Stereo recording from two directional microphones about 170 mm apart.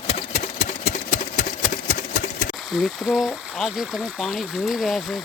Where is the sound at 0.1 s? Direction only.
35° left (ahead or behind).